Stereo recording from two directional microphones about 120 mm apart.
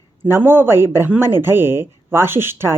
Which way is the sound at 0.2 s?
20° right (ahead or behind).